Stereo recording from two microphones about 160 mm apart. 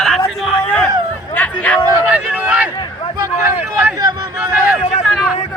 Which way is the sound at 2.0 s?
10° right (ahead or behind).